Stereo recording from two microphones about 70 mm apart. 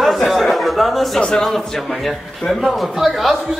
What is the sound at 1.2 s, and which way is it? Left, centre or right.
A man's voice, centre.